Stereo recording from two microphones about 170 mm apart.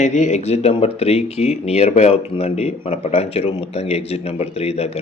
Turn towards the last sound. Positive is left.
turn(degrees=35)  # may be behind; listen again after turning